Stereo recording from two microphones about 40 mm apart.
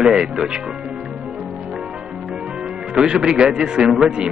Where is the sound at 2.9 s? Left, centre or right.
Centre.